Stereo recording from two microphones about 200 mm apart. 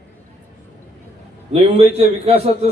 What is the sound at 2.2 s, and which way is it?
Speech, 30° right (ahead or behind).